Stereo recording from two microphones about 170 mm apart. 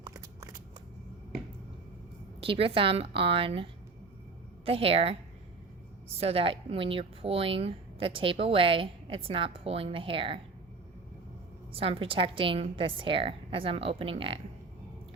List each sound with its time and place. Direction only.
0.0 s shuffling cards: 20° right (ahead or behind)
2.4 s speech: 30° right (ahead or behind)
6.1 s speech: 35° right (ahead or behind)
11.7 s speech: 35° right (ahead or behind)